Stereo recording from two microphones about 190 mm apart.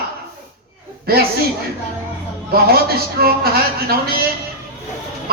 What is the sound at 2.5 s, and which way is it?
Speech, 55° right (ahead or behind).